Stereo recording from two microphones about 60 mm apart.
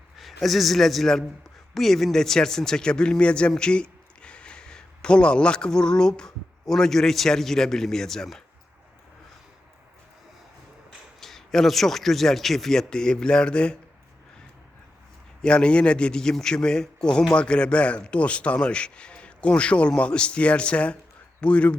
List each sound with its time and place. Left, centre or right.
0.2 s a man's voice: centre
11.2 s speech: centre
15.4 s a man's voice: centre